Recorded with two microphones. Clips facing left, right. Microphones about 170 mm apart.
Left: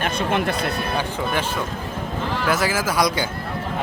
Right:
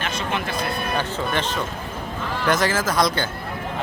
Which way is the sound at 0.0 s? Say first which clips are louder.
Left 5 dB; 55° left (ahead or behind).